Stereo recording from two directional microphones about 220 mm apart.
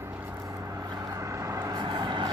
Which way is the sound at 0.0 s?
10° right (ahead or behind).